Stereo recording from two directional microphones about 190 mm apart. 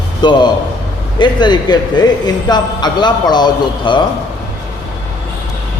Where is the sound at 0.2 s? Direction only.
25° left (ahead or behind).